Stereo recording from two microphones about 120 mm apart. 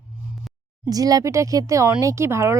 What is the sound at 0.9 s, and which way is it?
Speech, 30° right (ahead or behind).